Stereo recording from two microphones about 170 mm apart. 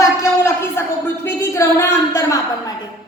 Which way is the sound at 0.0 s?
20° left (ahead or behind).